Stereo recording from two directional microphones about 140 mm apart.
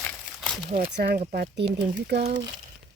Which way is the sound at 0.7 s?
70° right (ahead or behind).